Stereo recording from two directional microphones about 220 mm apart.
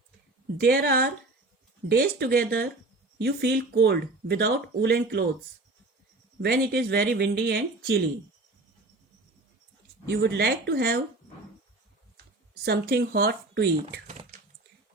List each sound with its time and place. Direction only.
0.6 s speech: 45° right (ahead or behind)
6.4 s speech: 50° right (ahead or behind)
10.1 s speech: 50° right (ahead or behind)
12.6 s speech: 45° right (ahead or behind)